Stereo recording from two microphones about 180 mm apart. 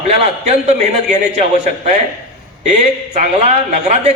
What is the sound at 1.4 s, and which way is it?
Speech, 40° right (ahead or behind).